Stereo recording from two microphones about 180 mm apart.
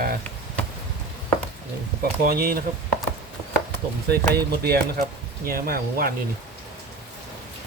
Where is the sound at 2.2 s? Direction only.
55° right (ahead or behind).